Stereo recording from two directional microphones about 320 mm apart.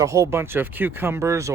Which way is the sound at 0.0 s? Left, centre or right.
Centre.